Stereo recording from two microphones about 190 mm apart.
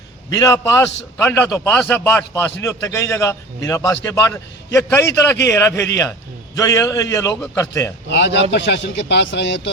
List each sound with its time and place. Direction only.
0.3 s a man's voice: 20° left (ahead or behind)
8.1 s a man's voice: 65° left (ahead or behind)